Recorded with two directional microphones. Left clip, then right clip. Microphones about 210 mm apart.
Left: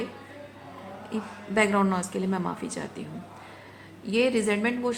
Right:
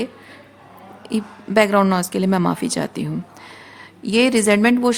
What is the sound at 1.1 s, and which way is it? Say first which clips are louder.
Speech: right 10 dB; 50° right (ahead or behind).